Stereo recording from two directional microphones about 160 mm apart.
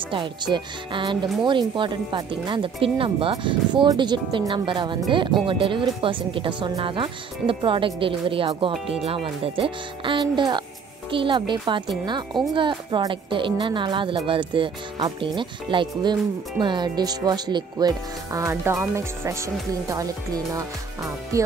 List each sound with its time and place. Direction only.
0.1 s speech: 30° right (ahead or behind)